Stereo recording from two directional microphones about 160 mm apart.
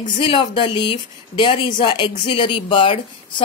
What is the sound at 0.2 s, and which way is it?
Speech, 30° left (ahead or behind).